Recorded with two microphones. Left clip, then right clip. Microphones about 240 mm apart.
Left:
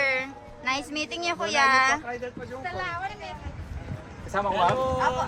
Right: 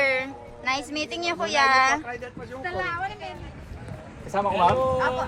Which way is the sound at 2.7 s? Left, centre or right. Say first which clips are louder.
Right 4 dB; right.